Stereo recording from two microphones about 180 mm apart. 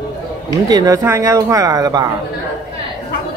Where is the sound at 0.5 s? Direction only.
20° right (ahead or behind).